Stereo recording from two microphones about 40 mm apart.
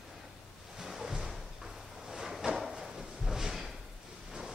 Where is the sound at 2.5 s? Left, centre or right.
Centre.